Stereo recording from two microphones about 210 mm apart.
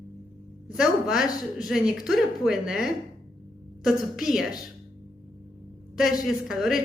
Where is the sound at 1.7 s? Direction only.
Centre (ahead or behind).